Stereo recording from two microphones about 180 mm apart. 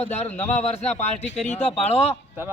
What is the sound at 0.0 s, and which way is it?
A man's voice, 35° left (ahead or behind).